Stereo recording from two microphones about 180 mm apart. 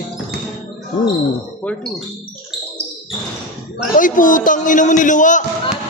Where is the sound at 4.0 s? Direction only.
45° left (ahead or behind).